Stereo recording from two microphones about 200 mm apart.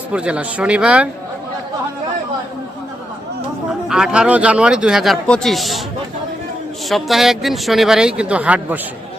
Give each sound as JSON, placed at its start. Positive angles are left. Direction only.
{"t": 0.1, "sound": "speech", "side_deg": -5}
{"t": 3.7, "sound": "speech", "side_deg": -5}
{"t": 6.8, "sound": "speech", "side_deg": 0}